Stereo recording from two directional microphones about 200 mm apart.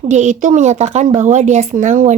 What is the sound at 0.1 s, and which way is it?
Speech, 35° right (ahead or behind).